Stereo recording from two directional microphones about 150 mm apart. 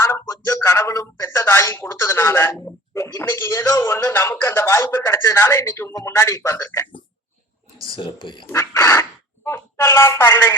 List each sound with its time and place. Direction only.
0.0 s speech: 20° left (ahead or behind)
7.9 s speech: 35° left (ahead or behind)
8.4 s speech: 15° left (ahead or behind)